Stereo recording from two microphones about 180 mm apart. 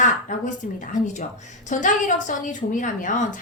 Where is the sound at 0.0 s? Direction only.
45° left (ahead or behind).